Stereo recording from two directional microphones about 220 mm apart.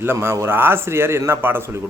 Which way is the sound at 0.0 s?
10° right (ahead or behind).